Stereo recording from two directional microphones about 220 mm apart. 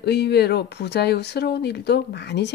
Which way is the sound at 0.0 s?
50° left (ahead or behind).